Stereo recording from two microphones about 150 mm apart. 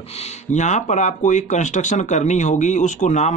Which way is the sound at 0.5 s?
55° left (ahead or behind).